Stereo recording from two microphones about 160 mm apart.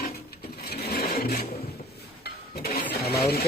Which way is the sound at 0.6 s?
75° left (ahead or behind).